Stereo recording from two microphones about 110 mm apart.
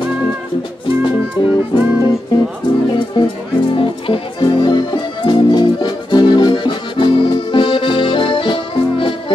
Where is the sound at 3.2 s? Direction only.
45° left (ahead or behind).